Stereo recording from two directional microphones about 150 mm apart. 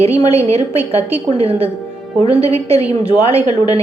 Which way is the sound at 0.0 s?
40° right (ahead or behind).